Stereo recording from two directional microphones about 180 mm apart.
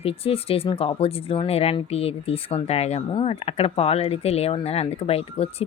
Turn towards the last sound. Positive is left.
turn(degrees=35)  # may be behind; listen again after turning